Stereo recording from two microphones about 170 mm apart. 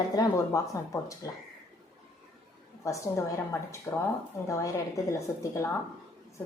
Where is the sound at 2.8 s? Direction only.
20° left (ahead or behind).